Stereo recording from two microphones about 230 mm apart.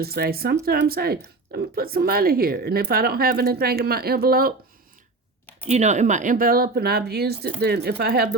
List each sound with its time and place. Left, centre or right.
0.0 s speech: right
5.6 s speech: right